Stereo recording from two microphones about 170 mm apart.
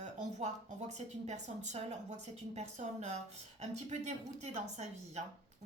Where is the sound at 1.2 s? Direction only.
45° right (ahead or behind).